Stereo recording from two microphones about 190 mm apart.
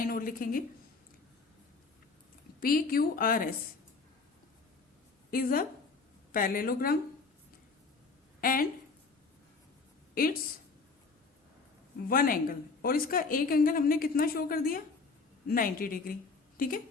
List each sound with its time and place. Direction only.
0.0 s a woman's voice: 50° left (ahead or behind)
2.6 s a woman's voice: 50° left (ahead or behind)
5.3 s a woman's voice: 50° left (ahead or behind)
8.4 s speech: 50° left (ahead or behind)
10.2 s a woman's voice: 50° left (ahead or behind)
12.0 s a woman's voice: 50° left (ahead or behind)